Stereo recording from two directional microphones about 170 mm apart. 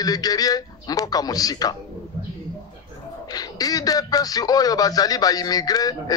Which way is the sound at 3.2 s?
20° left (ahead or behind).